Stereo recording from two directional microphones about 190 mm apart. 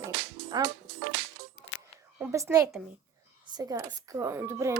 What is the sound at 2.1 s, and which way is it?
A child's voice, 15° right (ahead or behind).